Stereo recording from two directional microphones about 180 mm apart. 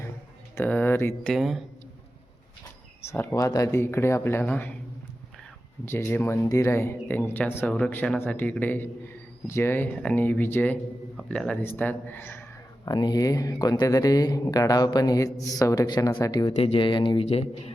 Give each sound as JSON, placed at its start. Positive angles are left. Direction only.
{"t": 0.5, "sound": "speech", "side_deg": 10}
{"t": 1.3, "sound": "speech", "side_deg": 0}
{"t": 3.1, "sound": "speech", "side_deg": 15}
{"t": 5.8, "sound": "speech", "side_deg": 10}
{"t": 11.8, "sound": "a sound", "side_deg": 10}
{"t": 12.9, "sound": "speech", "side_deg": 25}
{"t": 16.5, "sound": "speech", "side_deg": 35}